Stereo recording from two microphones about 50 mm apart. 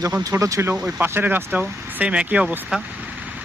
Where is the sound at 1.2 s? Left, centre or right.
Right.